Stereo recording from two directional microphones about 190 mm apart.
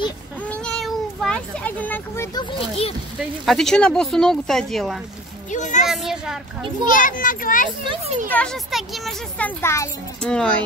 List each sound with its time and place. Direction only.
0.5 s a sound: centre (ahead or behind)
3.2 s speech: centre (ahead or behind)
5.5 s a child's voice: 40° left (ahead or behind)
5.9 s speech: centre (ahead or behind)
6.9 s a child's voice: 45° left (ahead or behind)
7.8 s a child's voice: 25° right (ahead or behind)
8.3 s speech: 5° left (ahead or behind)
9.6 s a child's voice: 15° left (ahead or behind)